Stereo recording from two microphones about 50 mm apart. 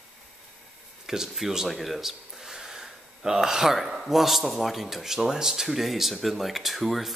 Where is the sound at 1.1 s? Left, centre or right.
Centre.